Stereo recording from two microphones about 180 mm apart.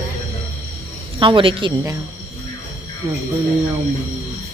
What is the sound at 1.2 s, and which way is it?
Speech, 30° right (ahead or behind).